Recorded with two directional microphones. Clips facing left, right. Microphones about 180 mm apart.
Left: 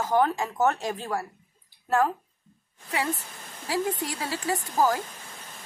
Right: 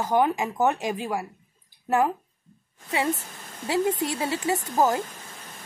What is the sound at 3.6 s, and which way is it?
Speech, 25° right (ahead or behind).